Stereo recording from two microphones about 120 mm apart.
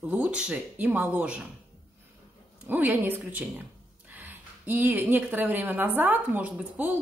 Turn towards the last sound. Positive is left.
turn(degrees=-15)  # may be behind; listen again after turning